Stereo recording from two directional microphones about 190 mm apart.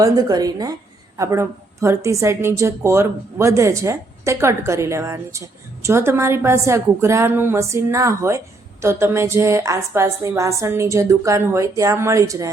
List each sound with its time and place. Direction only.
0.0 s a woman's voice: 20° right (ahead or behind)